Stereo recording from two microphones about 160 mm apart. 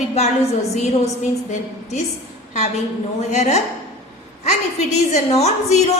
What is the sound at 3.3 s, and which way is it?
A woman's voice, 45° left (ahead or behind).